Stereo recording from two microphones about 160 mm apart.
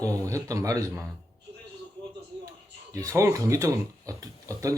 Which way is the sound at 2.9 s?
20° right (ahead or behind).